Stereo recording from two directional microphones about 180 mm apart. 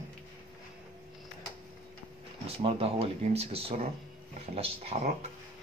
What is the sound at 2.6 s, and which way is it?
Speech, 30° right (ahead or behind).